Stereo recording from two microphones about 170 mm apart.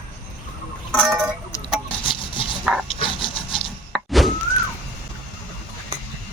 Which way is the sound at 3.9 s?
Centre (ahead or behind).